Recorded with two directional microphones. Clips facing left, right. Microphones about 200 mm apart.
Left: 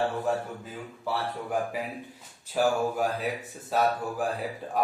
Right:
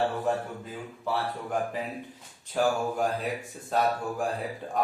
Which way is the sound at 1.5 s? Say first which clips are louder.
Even; 10° left (ahead or behind).